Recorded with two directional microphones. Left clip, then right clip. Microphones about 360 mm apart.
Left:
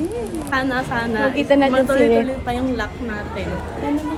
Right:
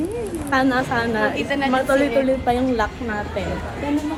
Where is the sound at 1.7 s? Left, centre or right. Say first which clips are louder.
Left 3 dB; centre.